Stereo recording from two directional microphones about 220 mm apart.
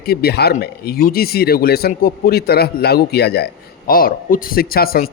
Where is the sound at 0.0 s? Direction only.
45° left (ahead or behind).